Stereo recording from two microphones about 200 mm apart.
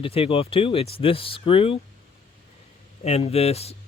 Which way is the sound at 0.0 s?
30° left (ahead or behind).